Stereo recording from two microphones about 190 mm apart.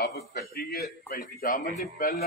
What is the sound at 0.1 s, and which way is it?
A man's voice, 60° left (ahead or behind).